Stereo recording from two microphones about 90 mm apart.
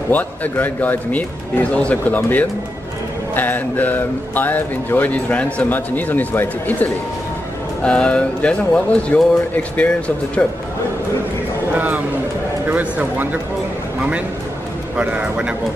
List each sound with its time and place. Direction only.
0.1 s speech: 20° left (ahead or behind)
7.8 s speech: 10° left (ahead or behind)
11.7 s a sound: 20° right (ahead or behind)
12.6 s speech: 20° right (ahead or behind)
15.0 s a man's voice: 10° right (ahead or behind)